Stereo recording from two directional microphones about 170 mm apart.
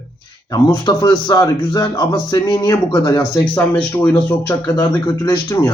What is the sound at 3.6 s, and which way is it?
Speech, 10° left (ahead or behind).